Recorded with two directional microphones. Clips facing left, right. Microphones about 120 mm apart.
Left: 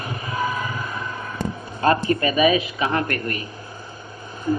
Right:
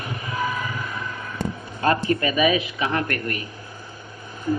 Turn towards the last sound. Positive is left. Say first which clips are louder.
# left 1 dB
turn(degrees=30)  # may be behind; listen again after turning